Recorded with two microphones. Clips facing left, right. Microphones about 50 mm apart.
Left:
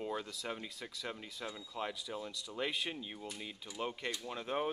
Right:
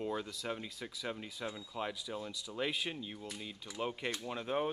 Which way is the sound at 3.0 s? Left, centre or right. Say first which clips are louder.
Right 1 dB; centre.